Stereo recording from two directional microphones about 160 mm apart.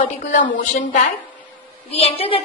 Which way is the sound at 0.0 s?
55° left (ahead or behind).